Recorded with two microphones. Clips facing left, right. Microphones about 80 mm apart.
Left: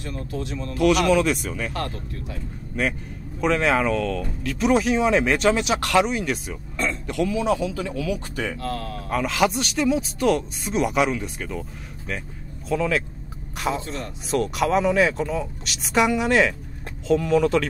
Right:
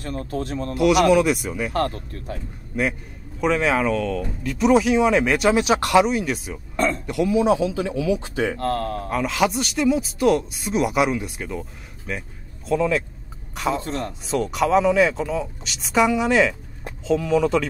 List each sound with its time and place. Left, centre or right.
0.0 s speech: right
0.7 s speech: centre
1.7 s speech: right
2.7 s speech: centre
7.2 s speech: centre
8.5 s speech: right
9.1 s speech: centre
13.7 s speech: right
14.2 s speech: centre